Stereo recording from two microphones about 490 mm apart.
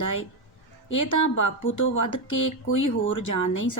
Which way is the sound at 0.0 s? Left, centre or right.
Left.